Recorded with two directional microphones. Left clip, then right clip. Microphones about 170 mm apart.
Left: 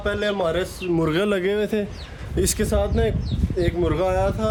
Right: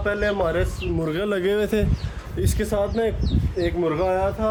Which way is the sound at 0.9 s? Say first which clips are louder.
Left 4 dB; 55° left (ahead or behind).